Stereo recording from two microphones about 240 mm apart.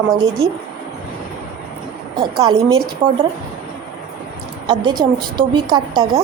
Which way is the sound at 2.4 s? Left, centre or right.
Centre.